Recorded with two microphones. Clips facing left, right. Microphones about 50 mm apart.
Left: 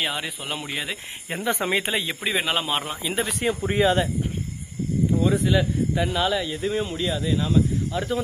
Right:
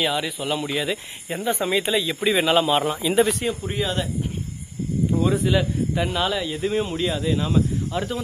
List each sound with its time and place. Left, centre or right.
0.0 s speech: centre
1.4 s speech: left
2.2 s speech: centre
3.7 s speech: left
5.1 s speech: centre